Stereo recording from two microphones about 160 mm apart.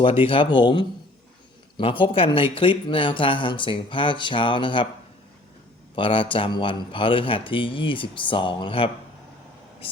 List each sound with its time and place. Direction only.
0.0 s speech: 35° left (ahead or behind)
6.0 s speech: 35° left (ahead or behind)